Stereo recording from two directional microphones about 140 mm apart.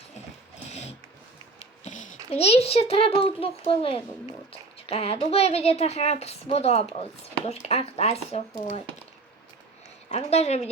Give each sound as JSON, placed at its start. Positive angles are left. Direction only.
{"t": 1.8, "sound": "a sound", "side_deg": 60}
{"t": 2.3, "sound": "speech", "side_deg": 50}
{"t": 10.1, "sound": "speech", "side_deg": 50}